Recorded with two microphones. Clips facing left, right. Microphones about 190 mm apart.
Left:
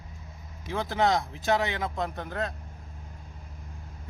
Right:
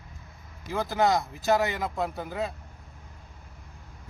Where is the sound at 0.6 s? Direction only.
5° right (ahead or behind).